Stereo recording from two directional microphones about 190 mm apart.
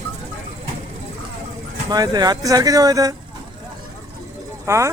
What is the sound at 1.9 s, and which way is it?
A man's voice, 20° right (ahead or behind).